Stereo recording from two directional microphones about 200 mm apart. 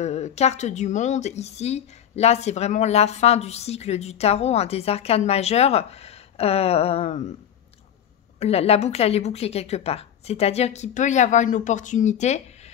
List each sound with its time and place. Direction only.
0.0 s speech: 35° left (ahead or behind)
8.4 s speech: 30° left (ahead or behind)